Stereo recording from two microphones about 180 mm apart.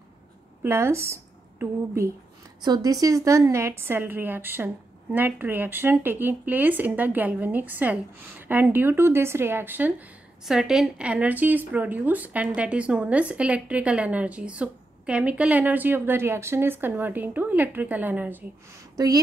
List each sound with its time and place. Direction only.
0.6 s a woman's voice: 15° right (ahead or behind)
19.0 s speech: 20° right (ahead or behind)